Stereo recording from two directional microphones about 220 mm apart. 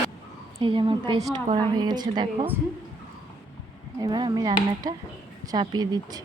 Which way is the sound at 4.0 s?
20° right (ahead or behind).